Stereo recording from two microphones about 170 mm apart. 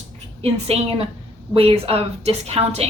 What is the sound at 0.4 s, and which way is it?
Speech, 35° right (ahead or behind).